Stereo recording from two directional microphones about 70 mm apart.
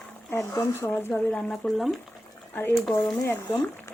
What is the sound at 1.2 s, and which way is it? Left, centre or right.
Speech, centre.